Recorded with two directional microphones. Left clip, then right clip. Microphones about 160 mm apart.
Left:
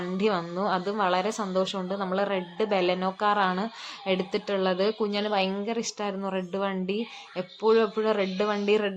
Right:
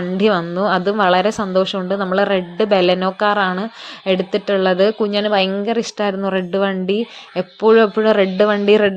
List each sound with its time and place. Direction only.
0.2 s a woman's voice: 30° right (ahead or behind)